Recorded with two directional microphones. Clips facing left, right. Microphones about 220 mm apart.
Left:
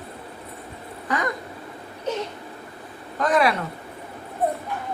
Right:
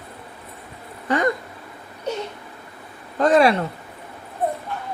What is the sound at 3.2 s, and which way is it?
Speech, 30° right (ahead or behind).